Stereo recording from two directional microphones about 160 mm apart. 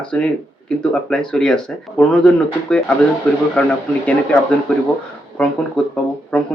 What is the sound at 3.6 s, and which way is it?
Speech, 5° left (ahead or behind).